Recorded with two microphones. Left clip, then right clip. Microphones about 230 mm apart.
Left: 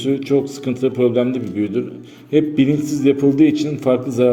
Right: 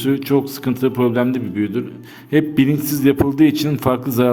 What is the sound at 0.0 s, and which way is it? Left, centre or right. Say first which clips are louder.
A man's voice: even; right.